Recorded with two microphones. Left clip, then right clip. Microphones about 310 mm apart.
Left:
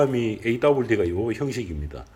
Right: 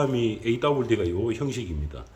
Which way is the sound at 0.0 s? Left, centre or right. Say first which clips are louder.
Left 3 dB; centre.